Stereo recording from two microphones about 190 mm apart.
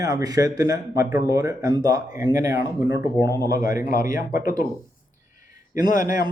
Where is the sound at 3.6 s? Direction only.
45° left (ahead or behind).